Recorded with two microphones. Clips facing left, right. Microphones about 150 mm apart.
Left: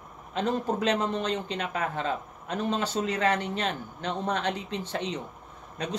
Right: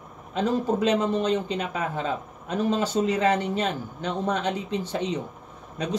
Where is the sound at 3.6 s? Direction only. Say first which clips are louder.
Right 3 dB; 5° right (ahead or behind).